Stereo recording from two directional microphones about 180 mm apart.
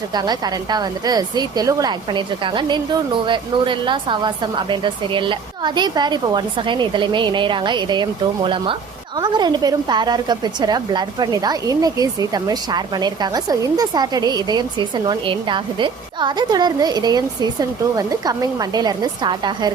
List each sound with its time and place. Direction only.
0.1 s a woman's voice: 20° right (ahead or behind)